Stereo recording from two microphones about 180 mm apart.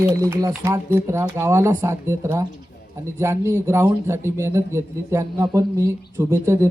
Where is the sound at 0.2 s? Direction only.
15° right (ahead or behind).